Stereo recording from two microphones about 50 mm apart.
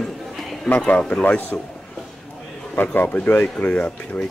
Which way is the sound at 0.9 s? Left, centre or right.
Left.